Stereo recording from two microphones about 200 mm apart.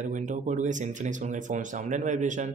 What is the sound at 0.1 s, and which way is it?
Speech, 40° right (ahead or behind).